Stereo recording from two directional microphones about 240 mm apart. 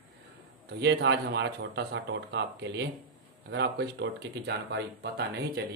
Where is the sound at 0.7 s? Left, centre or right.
Right.